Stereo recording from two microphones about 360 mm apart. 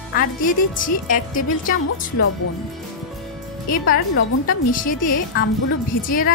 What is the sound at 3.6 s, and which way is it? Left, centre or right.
Speech, left.